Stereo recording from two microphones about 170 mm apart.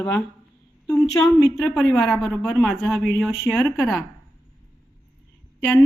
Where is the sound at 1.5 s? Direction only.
5° left (ahead or behind).